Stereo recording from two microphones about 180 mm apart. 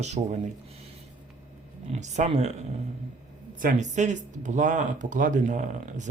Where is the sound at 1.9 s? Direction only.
40° right (ahead or behind).